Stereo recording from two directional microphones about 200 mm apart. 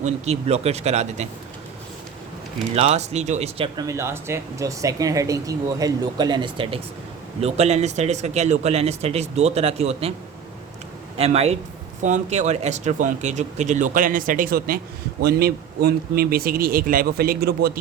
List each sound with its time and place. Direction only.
0.0 s speech: 30° right (ahead or behind)
2.7 s speech: 30° right (ahead or behind)
3.8 s speech: 15° right (ahead or behind); by 10.1 s 30° right (ahead or behind)
11.2 s speech: 30° right (ahead or behind); by 17.7 s 50° right (ahead or behind)